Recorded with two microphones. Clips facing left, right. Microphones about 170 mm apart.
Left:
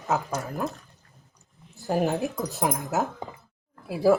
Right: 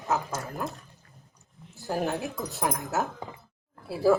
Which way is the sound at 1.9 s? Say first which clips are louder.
Left 4 dB; 20° left (ahead or behind).